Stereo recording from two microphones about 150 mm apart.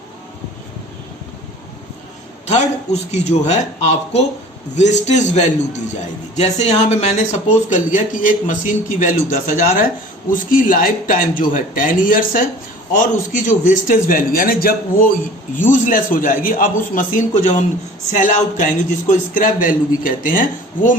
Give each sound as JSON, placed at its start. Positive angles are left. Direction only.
{"t": 2.5, "sound": "speech", "side_deg": 50}
{"t": 7.7, "sound": "a man's voice", "side_deg": 60}
{"t": 15.5, "sound": "a man's voice", "side_deg": 60}